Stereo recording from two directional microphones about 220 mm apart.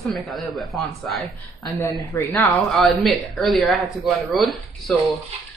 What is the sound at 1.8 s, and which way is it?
Speech, 10° left (ahead or behind).